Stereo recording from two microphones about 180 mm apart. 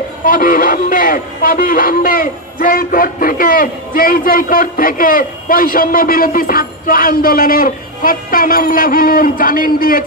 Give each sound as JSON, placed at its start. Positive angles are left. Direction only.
{"t": 0.2, "sound": "speech", "side_deg": 50}